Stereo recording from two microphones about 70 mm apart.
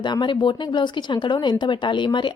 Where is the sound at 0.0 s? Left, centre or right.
Left.